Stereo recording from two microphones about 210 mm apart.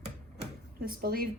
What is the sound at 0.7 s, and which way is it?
Speech, 45° right (ahead or behind).